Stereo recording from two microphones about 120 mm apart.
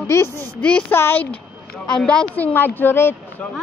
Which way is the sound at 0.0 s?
20° left (ahead or behind).